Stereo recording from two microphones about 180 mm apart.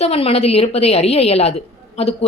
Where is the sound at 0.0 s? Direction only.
35° left (ahead or behind).